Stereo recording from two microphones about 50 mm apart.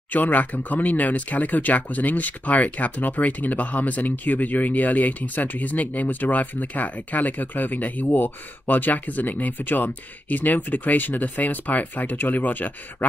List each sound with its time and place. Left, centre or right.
0.1 s speech: left